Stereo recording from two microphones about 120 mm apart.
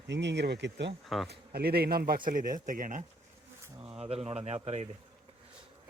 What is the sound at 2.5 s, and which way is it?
Speech, 90° right.